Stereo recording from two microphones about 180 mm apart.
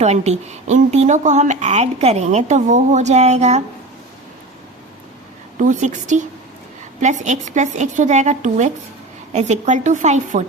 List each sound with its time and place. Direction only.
0.0 s a woman's voice: 40° right (ahead or behind)
5.5 s a woman's voice: 45° right (ahead or behind)